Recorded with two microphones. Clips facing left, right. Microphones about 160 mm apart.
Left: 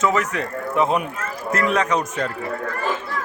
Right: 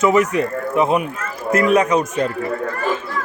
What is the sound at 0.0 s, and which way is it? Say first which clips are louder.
Speech: right 6 dB; 15° right (ahead or behind).